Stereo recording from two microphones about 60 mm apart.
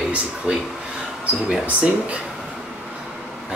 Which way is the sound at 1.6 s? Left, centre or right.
Right.